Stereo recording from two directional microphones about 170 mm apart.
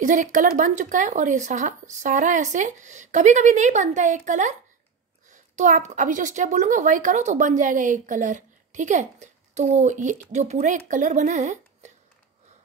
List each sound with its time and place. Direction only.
0.0 s a woman's voice: 50° right (ahead or behind)